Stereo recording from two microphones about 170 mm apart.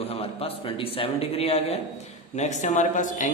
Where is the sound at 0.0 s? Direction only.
35° left (ahead or behind).